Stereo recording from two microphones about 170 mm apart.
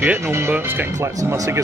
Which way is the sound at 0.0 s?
15° right (ahead or behind).